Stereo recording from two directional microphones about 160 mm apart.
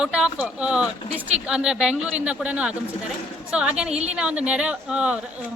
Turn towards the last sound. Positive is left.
turn(degrees=-5)  # may be behind; listen again after turning